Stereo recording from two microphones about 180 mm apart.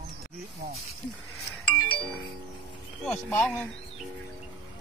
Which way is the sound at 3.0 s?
5° left (ahead or behind).